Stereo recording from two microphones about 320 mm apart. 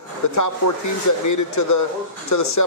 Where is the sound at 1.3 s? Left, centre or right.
Left.